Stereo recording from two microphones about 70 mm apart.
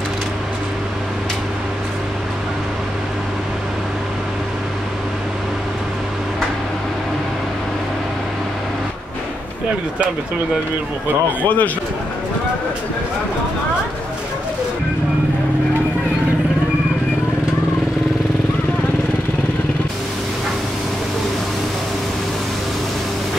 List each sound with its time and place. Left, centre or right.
11.4 s a man's voice: left